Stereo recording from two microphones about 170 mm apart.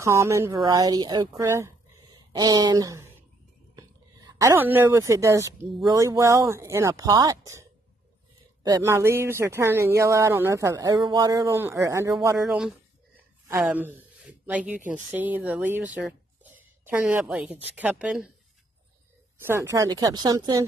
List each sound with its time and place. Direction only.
0.0 s a woman's voice: 15° right (ahead or behind)
8.6 s speech: 20° right (ahead or behind)
12.4 s speech: 5° right (ahead or behind)
19.4 s speech: 15° right (ahead or behind)